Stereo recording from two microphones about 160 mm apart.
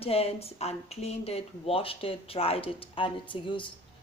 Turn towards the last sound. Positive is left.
turn(degrees=30)  # may be behind; listen again after turning